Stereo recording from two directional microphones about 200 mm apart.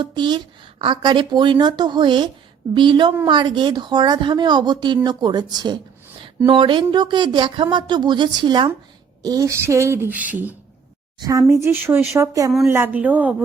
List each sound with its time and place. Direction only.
0.0 s speech: 20° right (ahead or behind)